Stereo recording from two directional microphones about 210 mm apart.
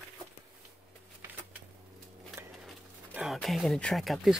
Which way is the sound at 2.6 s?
Centre (ahead or behind).